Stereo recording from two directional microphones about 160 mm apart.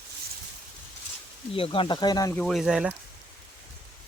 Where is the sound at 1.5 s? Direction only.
35° left (ahead or behind).